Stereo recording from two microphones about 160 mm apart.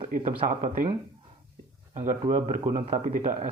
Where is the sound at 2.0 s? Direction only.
50° right (ahead or behind).